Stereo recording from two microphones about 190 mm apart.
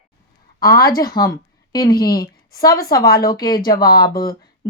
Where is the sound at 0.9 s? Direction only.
20° left (ahead or behind).